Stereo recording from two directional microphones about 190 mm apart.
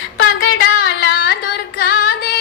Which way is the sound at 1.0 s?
55° left (ahead or behind).